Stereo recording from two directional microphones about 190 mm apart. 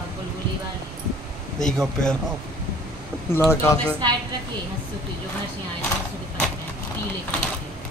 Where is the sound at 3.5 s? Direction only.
15° left (ahead or behind).